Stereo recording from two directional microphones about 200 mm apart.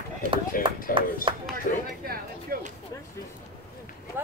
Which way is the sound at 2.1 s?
45° right (ahead or behind).